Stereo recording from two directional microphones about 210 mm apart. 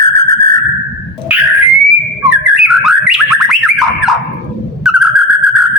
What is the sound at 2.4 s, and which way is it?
Bird, 5° right (ahead or behind).